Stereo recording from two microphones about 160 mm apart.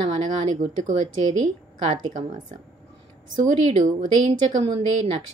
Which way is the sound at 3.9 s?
35° right (ahead or behind).